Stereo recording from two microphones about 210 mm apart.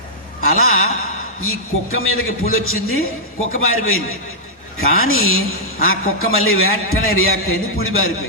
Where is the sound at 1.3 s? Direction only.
80° left.